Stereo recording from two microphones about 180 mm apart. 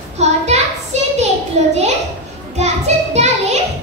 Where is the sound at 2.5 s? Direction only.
35° right (ahead or behind).